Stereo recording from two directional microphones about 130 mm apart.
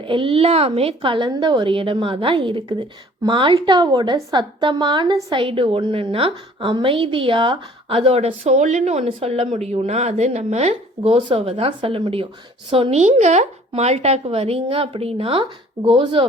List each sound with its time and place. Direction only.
0.0 s a woman's voice: 40° right (ahead or behind)
13.0 s a woman's voice: 60° right (ahead or behind); by 16.2 s 40° right (ahead or behind)